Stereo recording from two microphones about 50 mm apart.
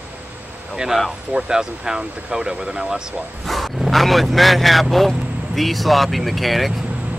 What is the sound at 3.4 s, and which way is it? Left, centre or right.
Speech, centre.